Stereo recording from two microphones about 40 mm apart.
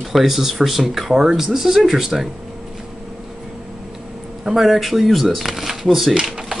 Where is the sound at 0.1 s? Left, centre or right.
Centre.